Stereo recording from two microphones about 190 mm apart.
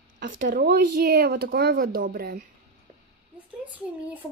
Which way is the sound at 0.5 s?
50° right (ahead or behind).